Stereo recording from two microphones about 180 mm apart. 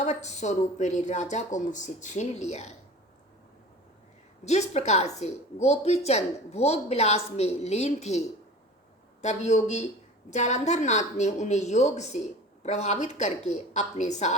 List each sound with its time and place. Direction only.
0.0 s a woman's voice: 40° left (ahead or behind)
4.4 s a woman's voice: 40° left (ahead or behind)
9.2 s a woman's voice: 40° left (ahead or behind)